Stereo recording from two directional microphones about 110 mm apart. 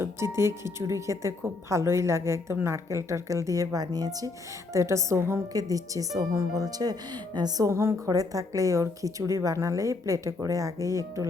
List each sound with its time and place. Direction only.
0.0 s speech: 25° right (ahead or behind)